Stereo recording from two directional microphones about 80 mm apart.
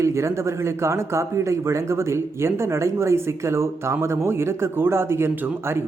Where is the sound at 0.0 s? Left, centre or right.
Right.